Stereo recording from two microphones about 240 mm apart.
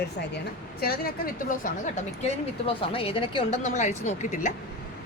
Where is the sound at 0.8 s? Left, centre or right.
Left.